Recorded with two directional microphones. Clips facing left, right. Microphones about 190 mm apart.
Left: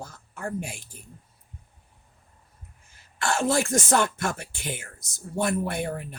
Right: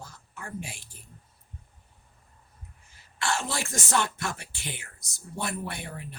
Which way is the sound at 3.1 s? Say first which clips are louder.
Left 7 dB; 45° left (ahead or behind).